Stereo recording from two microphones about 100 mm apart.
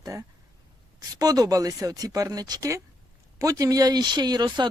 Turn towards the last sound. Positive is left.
turn(degrees=-45)  # may be behind; listen again after turning